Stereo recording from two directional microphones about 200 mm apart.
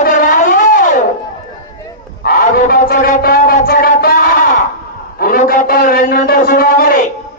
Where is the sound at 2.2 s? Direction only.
45° left (ahead or behind).